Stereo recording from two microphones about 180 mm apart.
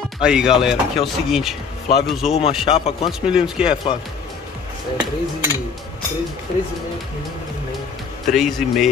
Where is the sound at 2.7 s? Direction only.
30° left (ahead or behind).